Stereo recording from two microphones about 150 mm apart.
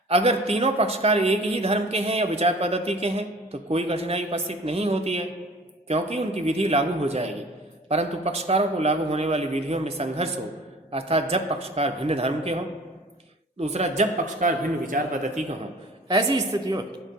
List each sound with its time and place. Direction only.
0.1 s a man's voice: 45° right (ahead or behind)
13.6 s a man's voice: 45° right (ahead or behind)